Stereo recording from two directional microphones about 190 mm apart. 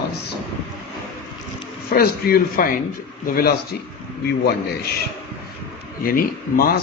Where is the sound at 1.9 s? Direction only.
55° left (ahead or behind).